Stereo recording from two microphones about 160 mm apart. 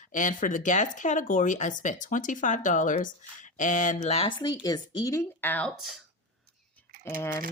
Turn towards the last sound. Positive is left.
turn(degrees=15)  # may be behind; listen again after turning